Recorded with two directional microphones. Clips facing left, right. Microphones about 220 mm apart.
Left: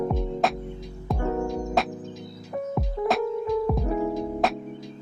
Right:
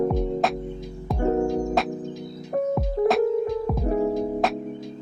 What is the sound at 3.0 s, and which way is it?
Music, 40° right (ahead or behind).